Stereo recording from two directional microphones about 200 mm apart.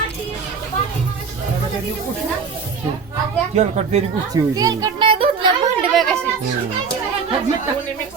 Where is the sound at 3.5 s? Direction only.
35° right (ahead or behind).